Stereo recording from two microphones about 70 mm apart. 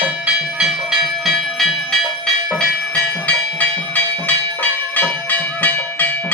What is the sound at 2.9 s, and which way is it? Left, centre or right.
Music, left.